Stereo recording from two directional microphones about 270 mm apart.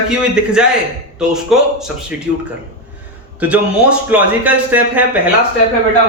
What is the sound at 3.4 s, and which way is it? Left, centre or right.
A man's voice, centre.